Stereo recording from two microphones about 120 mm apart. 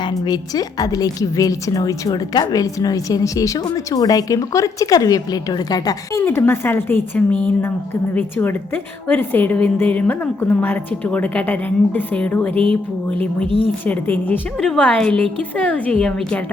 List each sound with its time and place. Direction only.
0.0 s a woman's voice: 30° left (ahead or behind)
6.2 s a woman's voice: 20° left (ahead or behind)
13.8 s a woman's voice: 15° left (ahead or behind)